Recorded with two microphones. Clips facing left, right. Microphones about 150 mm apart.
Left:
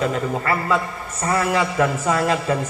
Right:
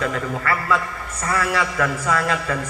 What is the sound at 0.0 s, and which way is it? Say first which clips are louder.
A man's voice: left 2 dB; 25° left (ahead or behind).